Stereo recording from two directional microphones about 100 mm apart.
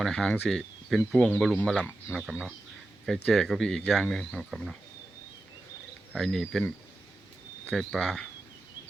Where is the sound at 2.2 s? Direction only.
10° right (ahead or behind).